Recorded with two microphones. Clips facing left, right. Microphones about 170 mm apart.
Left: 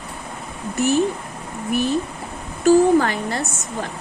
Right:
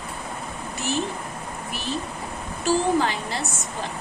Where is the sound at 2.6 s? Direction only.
50° left (ahead or behind).